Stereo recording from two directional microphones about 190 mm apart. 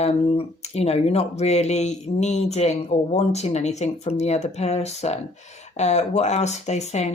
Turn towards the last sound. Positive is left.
turn(degrees=35)  # may be behind; listen again after turning